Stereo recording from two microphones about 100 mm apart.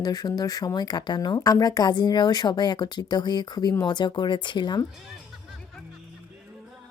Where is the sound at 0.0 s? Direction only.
40° left (ahead or behind).